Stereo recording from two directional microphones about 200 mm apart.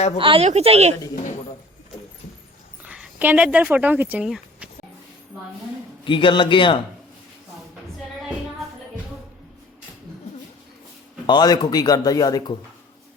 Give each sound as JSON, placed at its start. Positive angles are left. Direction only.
{"t": 0.2, "sound": "speech", "side_deg": -25}
{"t": 2.8, "sound": "speech", "side_deg": -5}
{"t": 6.1, "sound": "speech", "side_deg": 25}
{"t": 11.3, "sound": "speech", "side_deg": 20}